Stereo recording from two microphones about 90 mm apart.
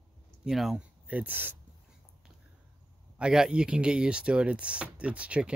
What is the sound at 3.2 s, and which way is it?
Speech, 10° right (ahead or behind).